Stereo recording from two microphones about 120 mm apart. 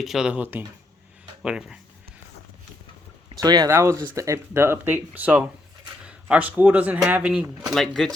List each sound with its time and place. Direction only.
0.0 s speech: 5° right (ahead or behind)
3.3 s speech: 35° right (ahead or behind)
3.7 s speech: 25° right (ahead or behind)
7.7 s speech: centre (ahead or behind)